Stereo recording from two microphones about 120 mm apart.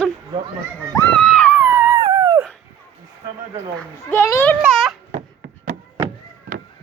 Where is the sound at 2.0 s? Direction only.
35° right (ahead or behind).